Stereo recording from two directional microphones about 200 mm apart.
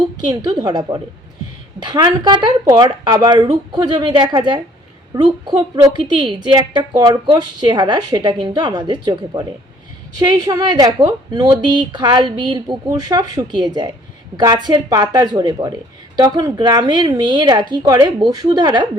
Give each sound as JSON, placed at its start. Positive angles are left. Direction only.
{"t": 0.3, "sound": "a woman's voice", "side_deg": -20}